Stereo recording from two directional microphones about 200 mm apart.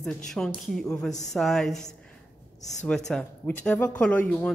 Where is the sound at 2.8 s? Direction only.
5° left (ahead or behind).